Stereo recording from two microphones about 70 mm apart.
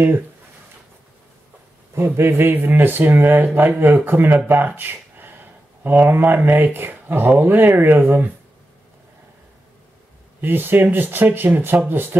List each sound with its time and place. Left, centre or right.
2.0 s speech: right
10.4 s speech: right